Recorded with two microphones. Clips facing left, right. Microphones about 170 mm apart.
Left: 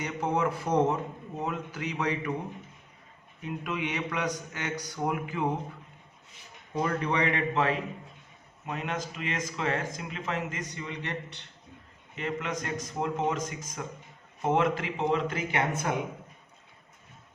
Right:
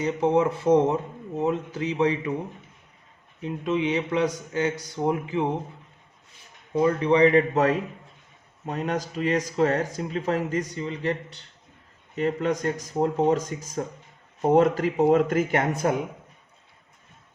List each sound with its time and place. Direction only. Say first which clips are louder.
0.0 s a man's voice: right 7 dB; 25° right (ahead or behind)
3.4 s a man's voice: right 8 dB; 25° right (ahead or behind)
6.8 s speech: right 10 dB; 25° right (ahead or behind)